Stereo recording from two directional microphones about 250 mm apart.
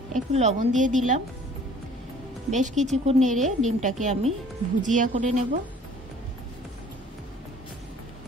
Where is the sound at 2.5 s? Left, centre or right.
Right.